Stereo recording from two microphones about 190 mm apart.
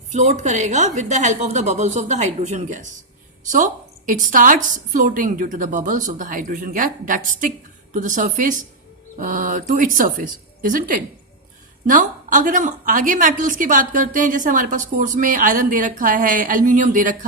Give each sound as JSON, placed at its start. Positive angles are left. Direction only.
{"t": 0.1, "sound": "a woman's voice", "side_deg": -35}